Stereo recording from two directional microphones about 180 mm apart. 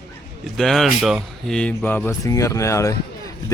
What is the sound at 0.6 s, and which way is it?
Speech, centre (ahead or behind).